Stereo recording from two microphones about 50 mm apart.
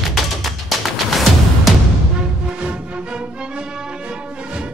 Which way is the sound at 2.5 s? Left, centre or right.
Right.